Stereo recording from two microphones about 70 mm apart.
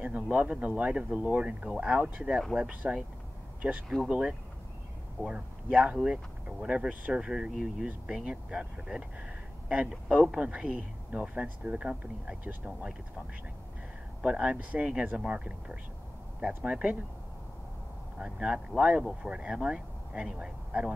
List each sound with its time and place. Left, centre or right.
0.0 s speech: right
7.2 s speech: centre
14.2 s speech: centre
18.1 s speech: centre